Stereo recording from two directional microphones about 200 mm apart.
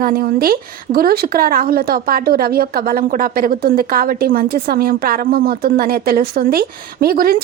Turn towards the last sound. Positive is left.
turn(degrees=-45)  # may be behind; listen again after turning